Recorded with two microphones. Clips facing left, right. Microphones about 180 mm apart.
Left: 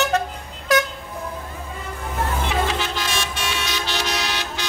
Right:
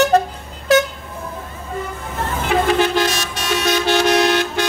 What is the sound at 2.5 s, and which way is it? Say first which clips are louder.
Toot: right 8 dB; 55° right (ahead or behind).